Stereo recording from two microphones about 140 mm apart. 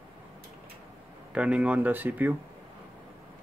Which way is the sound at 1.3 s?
10° right (ahead or behind).